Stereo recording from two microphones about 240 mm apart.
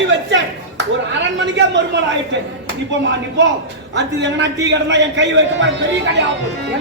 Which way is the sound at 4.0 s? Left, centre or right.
Right.